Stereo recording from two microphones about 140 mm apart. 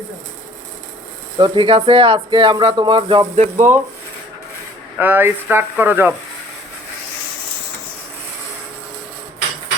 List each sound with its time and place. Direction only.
1.4 s speech: 40° right (ahead or behind)
3.3 s speech: 55° right (ahead or behind)
4.9 s speech: 15° right (ahead or behind)